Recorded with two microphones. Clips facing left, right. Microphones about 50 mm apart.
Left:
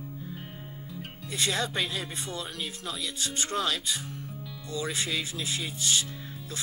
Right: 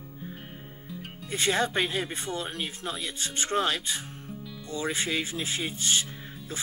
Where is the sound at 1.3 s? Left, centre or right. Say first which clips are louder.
Right 4 dB; right.